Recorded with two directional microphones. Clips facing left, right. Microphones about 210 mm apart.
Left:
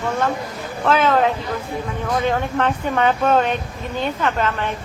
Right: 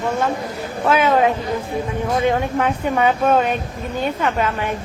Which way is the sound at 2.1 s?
25° right (ahead or behind).